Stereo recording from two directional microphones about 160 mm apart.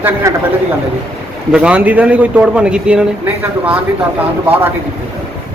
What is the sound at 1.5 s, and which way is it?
A man's voice, 5° right (ahead or behind).